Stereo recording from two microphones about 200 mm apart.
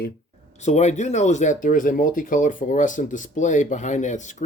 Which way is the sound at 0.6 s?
35° left (ahead or behind).